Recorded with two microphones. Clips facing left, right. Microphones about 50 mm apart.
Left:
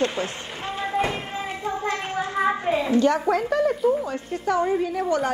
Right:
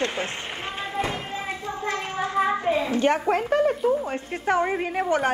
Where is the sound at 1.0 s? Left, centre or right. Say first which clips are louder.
Left 2 dB; left.